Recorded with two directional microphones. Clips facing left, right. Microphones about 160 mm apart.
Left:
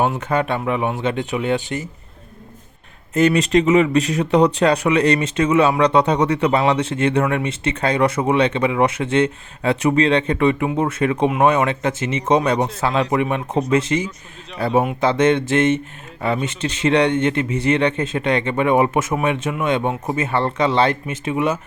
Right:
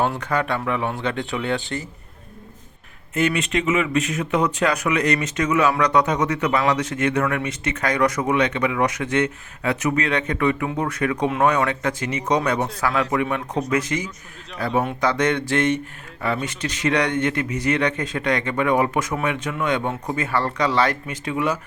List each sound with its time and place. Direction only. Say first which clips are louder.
0.0 s speech: left 3 dB; 20° left (ahead or behind)
3.2 s speech: left 6 dB; 40° left (ahead or behind); by 21.6 s 25° left (ahead or behind)